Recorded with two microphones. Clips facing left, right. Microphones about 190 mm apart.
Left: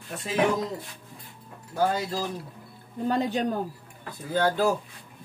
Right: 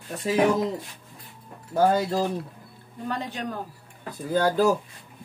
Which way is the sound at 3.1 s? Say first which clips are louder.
Left 6 dB; 35° left (ahead or behind).